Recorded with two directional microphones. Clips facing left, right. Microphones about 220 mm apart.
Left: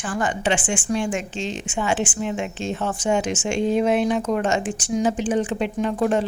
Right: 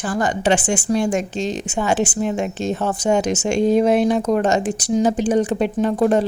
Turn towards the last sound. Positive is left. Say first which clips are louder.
# right 4 dB
turn(degrees=-40)  # may be behind; listen again after turning